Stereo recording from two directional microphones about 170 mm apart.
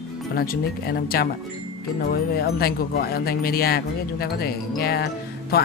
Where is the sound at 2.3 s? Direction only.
65° left (ahead or behind).